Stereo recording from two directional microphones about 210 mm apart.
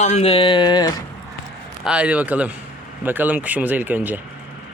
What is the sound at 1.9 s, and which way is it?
Speech, 5° right (ahead or behind).